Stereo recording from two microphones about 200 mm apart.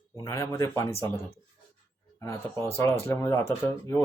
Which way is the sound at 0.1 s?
15° left (ahead or behind).